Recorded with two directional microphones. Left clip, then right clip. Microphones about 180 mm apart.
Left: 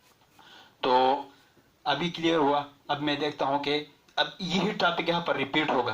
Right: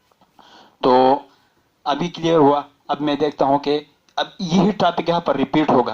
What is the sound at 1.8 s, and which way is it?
Speech, 40° right (ahead or behind).